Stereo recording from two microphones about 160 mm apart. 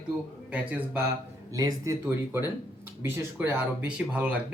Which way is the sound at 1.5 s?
20° right (ahead or behind).